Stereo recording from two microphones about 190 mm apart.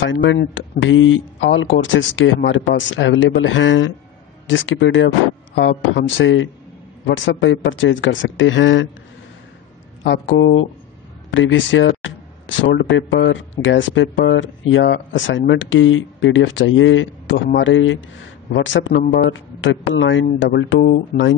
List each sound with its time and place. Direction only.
0.0 s speech: 80° left
10.0 s speech: 70° left (ahead or behind)